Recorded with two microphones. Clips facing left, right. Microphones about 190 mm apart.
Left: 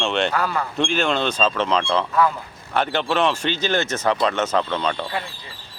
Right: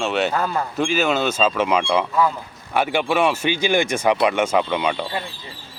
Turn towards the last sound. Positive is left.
turn(degrees=-10)  # may be behind; listen again after turning